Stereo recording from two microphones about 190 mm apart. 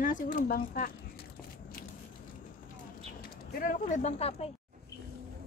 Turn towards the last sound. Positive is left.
turn(degrees=35)  # may be behind; listen again after turning